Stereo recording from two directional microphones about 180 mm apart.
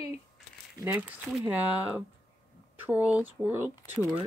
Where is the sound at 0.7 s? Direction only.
10° right (ahead or behind).